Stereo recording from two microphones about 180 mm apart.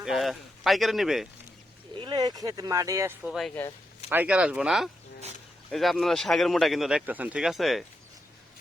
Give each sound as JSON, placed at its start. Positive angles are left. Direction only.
{"t": 0.0, "sound": "speech", "side_deg": 0}
{"t": 2.0, "sound": "speech", "side_deg": -25}
{"t": 3.2, "sound": "speech", "side_deg": 0}